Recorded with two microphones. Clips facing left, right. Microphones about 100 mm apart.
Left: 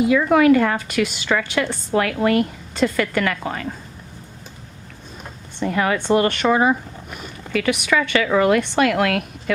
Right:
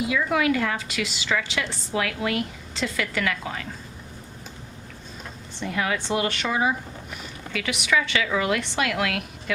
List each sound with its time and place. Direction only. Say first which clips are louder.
0.1 s a woman's voice: left 9 dB; 50° left (ahead or behind)
5.5 s a woman's voice: left 6 dB; 50° left (ahead or behind)